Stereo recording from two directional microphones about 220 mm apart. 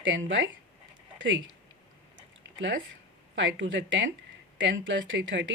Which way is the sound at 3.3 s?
55° right (ahead or behind).